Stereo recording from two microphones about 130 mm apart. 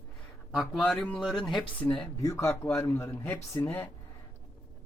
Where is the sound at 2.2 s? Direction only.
20° left (ahead or behind).